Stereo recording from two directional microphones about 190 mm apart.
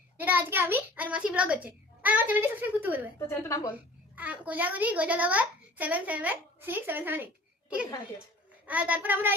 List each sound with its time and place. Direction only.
0.2 s a child's voice: 10° right (ahead or behind)
3.2 s a woman's voice: 15° left (ahead or behind)
4.1 s a child's voice: 10° right (ahead or behind)
8.6 s a child's voice: 10° right (ahead or behind)